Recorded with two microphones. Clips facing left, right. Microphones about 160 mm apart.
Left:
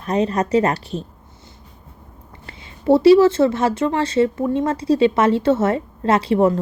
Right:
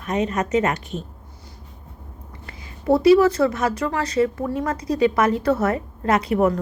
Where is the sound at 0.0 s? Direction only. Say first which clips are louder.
Left 3 dB; 35° left (ahead or behind).